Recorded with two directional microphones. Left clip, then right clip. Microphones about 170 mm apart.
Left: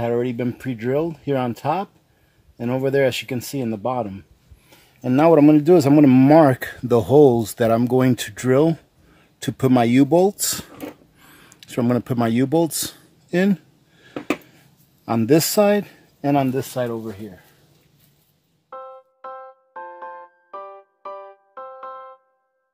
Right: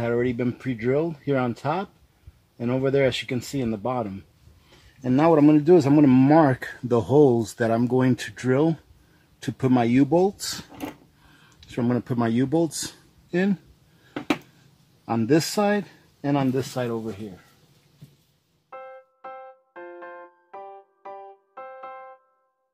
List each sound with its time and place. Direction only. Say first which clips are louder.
0.0 s speech: left 2 dB; 60° left (ahead or behind)
5.0 s speech: left 4 dB; 75° left (ahead or behind)
15.0 s speech: left 4 dB; 85° left; by 17.1 s 55° left (ahead or behind)